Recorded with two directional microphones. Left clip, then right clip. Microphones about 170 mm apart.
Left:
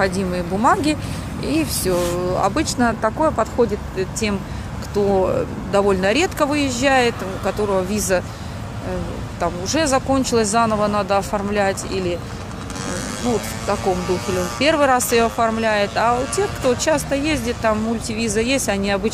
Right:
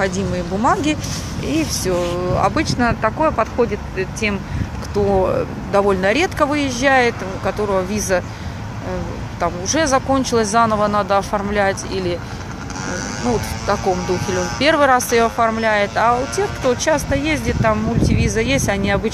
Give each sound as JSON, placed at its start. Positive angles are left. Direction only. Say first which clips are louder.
{"t": 0.3, "sound": "speech", "louder": "even", "side_deg": 5}
{"t": 9.4, "sound": "speech", "louder": "right 2 dB", "side_deg": 10}
{"t": 12.9, "sound": "vehicle", "louder": "right 2 dB", "side_deg": 25}
{"t": 13.7, "sound": "speech", "louder": "right 2 dB", "side_deg": 5}